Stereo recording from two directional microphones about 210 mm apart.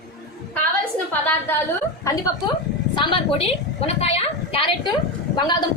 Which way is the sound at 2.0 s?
15° left (ahead or behind).